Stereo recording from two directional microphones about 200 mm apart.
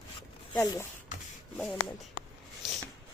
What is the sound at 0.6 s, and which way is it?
Speech, 20° left (ahead or behind).